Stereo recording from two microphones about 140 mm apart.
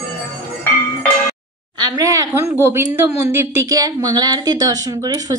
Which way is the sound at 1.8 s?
25° right (ahead or behind).